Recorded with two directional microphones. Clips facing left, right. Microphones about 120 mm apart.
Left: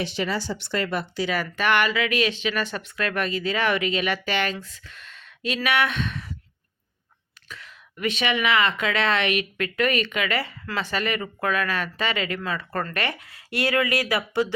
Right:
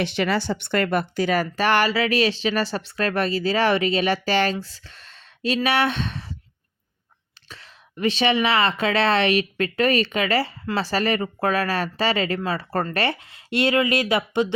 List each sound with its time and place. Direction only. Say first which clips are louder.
0.0 s speech: right 4 dB; 65° right (ahead or behind); by 6.3 s 30° right (ahead or behind)
7.4 s speech: left 2 dB; 30° right (ahead or behind)